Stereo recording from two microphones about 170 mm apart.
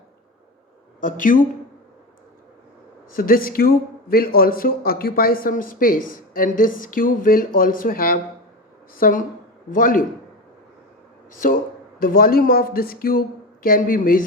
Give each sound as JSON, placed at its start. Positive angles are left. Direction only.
{"t": 1.0, "sound": "speech", "side_deg": 50}
{"t": 3.2, "sound": "speech", "side_deg": 55}
{"t": 11.3, "sound": "speech", "side_deg": 55}